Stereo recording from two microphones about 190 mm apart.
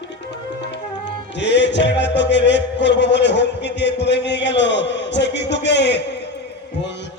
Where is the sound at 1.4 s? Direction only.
65° left (ahead or behind).